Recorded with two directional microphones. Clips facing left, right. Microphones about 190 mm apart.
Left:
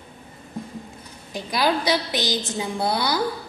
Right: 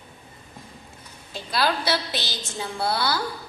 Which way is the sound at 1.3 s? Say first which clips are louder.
Left 3 dB; 15° left (ahead or behind).